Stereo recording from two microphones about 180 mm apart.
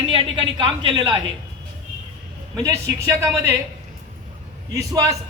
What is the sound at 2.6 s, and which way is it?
Speech, 20° right (ahead or behind).